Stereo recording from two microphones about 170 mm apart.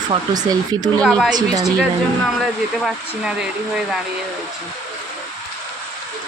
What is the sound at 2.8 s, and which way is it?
Speech, 5° right (ahead or behind).